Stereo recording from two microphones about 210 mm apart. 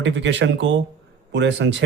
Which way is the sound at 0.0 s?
60° right (ahead or behind).